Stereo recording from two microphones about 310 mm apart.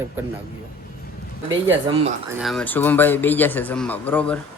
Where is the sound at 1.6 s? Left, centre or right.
Centre.